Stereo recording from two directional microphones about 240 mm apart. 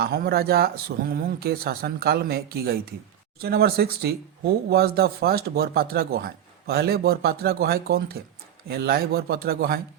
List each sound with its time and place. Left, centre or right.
0.0 s speech: right